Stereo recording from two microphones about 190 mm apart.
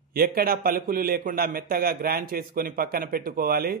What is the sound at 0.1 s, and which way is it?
Speech, 50° right (ahead or behind).